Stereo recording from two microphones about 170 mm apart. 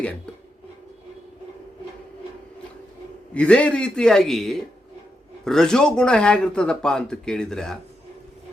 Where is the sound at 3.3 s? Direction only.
5° left (ahead or behind).